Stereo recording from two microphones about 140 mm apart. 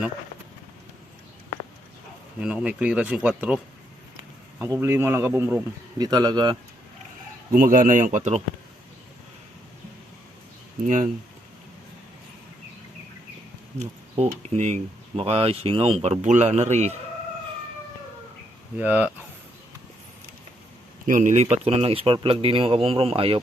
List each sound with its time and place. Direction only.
2.4 s speech: 5° right (ahead or behind)
4.6 s speech: 20° right (ahead or behind)
6.0 s speech: 30° right (ahead or behind)
7.5 s speech: 80° right; by 8.4 s 60° right (ahead or behind)
10.8 s speech: 70° right (ahead or behind)
13.7 s speech: 55° right (ahead or behind)
18.8 s speech: 10° right (ahead or behind)
21.1 s speech: 65° right (ahead or behind)
21.5 s speech: 50° right (ahead or behind)